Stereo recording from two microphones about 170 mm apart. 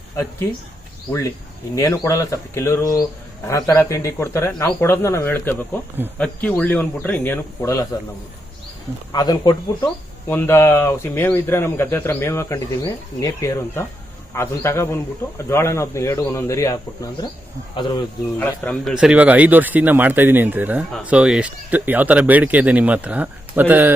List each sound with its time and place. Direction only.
1.7 s speech: 20° left (ahead or behind)
9.1 s speech: 25° left (ahead or behind)
18.3 s speech: 10° left (ahead or behind)
18.9 s speech: 5° right (ahead or behind)